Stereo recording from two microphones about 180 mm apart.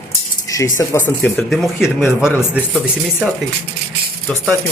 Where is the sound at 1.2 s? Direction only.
Centre (ahead or behind).